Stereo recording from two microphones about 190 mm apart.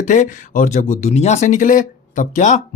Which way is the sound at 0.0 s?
40° left (ahead or behind).